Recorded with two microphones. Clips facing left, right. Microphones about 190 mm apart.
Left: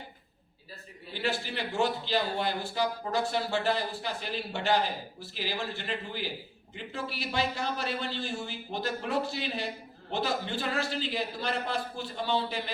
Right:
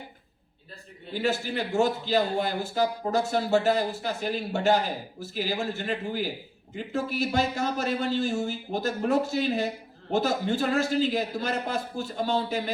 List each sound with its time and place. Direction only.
1.1 s a man's voice: 45° right (ahead or behind)